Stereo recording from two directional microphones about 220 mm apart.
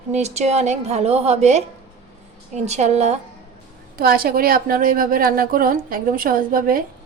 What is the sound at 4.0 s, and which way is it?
A woman's voice, 40° right (ahead or behind).